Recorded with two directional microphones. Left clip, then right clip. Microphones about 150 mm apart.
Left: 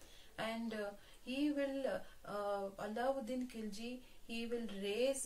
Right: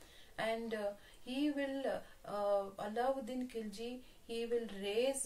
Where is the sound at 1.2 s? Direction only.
25° right (ahead or behind).